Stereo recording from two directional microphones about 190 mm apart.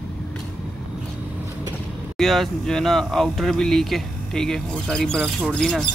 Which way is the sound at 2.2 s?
Centre (ahead or behind).